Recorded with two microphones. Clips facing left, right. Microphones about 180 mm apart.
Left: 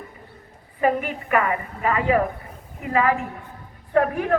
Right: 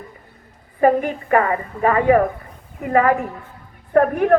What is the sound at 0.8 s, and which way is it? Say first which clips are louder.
A woman's voice: right 6 dB; 35° right (ahead or behind).